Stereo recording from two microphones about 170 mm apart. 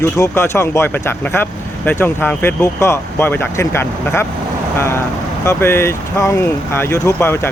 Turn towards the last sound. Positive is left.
turn(degrees=15)  # may be behind; listen again after turning